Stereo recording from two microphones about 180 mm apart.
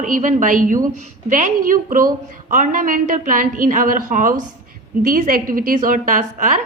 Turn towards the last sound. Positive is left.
turn(degrees=-45)  # may be behind; listen again after turning